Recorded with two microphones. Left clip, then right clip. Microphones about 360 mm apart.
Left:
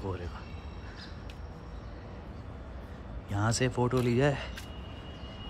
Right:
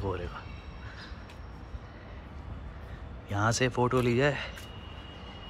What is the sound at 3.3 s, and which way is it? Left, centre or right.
Speech, centre.